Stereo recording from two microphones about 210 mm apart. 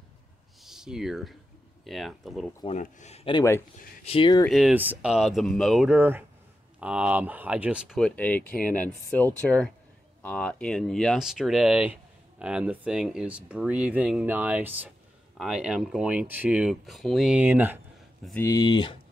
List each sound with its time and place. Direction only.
0.6 s a sound: centre (ahead or behind)
1.9 s speech: centre (ahead or behind)
2.6 s speech: 35° left (ahead or behind)
4.5 s speech: centre (ahead or behind)
18.4 s speech: 15° left (ahead or behind)